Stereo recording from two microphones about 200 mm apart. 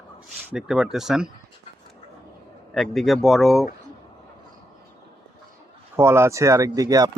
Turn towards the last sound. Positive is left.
turn(degrees=-15)  # may be behind; listen again after turning